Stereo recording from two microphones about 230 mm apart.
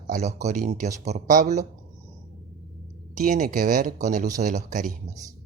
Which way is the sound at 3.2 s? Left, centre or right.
Right.